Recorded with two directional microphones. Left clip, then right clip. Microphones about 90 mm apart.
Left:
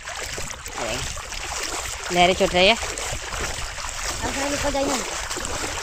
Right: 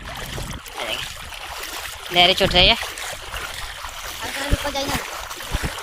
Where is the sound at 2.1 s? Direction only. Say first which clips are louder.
Right 3 dB; 10° left (ahead or behind).